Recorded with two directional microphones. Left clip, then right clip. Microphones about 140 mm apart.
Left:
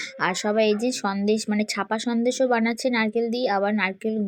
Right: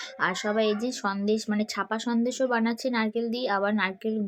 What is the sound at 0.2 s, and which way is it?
Speech, 35° left (ahead or behind).